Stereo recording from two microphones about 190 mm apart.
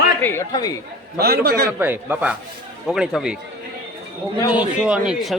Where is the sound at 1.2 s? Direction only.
55° right (ahead or behind).